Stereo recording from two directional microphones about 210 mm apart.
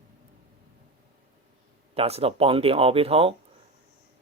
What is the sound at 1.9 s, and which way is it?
Speech, 30° right (ahead or behind).